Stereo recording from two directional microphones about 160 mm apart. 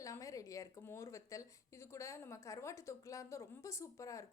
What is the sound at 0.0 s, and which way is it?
A woman's voice, 20° left (ahead or behind).